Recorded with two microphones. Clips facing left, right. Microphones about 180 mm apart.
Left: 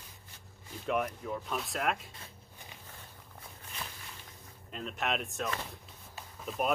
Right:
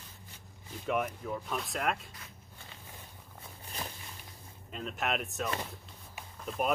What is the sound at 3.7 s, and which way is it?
Walk, 35° right (ahead or behind).